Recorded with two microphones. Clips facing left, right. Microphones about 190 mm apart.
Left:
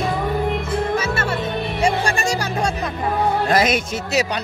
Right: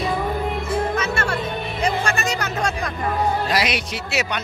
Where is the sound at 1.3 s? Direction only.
30° left (ahead or behind).